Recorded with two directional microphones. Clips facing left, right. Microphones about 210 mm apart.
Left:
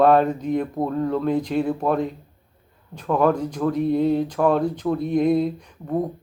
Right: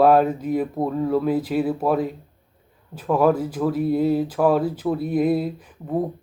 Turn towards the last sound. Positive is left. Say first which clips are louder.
# even
turn(degrees=-5)  # may be behind; listen again after turning